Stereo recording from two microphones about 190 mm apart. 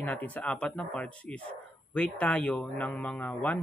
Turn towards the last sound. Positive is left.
turn(degrees=10)  # may be behind; listen again after turning